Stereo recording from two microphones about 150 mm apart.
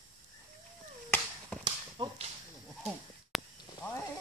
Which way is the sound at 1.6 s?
35° right (ahead or behind).